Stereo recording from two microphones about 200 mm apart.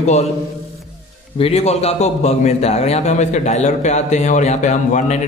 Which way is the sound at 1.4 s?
30° left (ahead or behind).